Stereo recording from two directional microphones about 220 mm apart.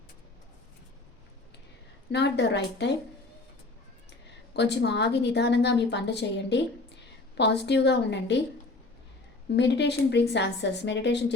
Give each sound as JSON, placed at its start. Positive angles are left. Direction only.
{"t": 2.1, "sound": "a woman's voice", "side_deg": 50}
{"t": 4.5, "sound": "a woman's voice", "side_deg": 50}
{"t": 9.6, "sound": "a woman's voice", "side_deg": 50}